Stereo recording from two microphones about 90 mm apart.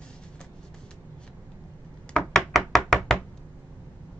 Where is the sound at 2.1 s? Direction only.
5° left (ahead or behind).